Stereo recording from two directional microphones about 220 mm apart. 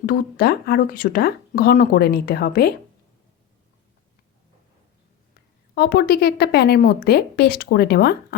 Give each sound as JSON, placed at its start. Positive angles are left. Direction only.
{"t": 0.0, "sound": "speech", "side_deg": 40}
{"t": 5.7, "sound": "speech", "side_deg": 45}